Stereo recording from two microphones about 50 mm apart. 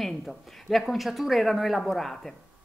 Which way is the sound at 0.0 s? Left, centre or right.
Centre.